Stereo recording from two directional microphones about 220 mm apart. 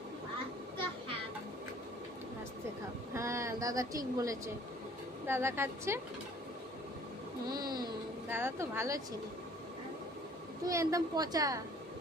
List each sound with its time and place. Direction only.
3.2 s a woman's voice: 15° right (ahead or behind)
7.6 s speech: 20° right (ahead or behind)
10.6 s a woman's voice: 15° right (ahead or behind)